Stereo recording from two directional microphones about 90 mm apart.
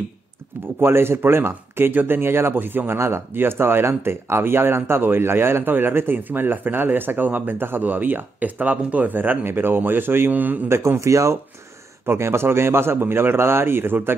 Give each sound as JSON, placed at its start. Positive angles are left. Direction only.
{"t": 0.7, "sound": "speech", "side_deg": -25}
{"t": 10.8, "sound": "speech", "side_deg": -35}